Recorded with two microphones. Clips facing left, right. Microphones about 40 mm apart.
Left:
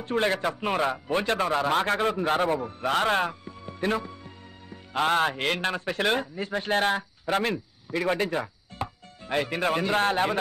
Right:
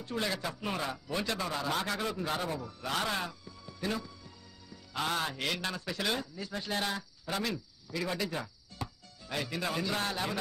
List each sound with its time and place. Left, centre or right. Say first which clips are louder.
0.0 s a man's voice: left 9 dB; left